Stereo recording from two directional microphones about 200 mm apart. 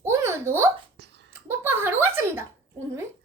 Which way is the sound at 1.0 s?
60° right (ahead or behind).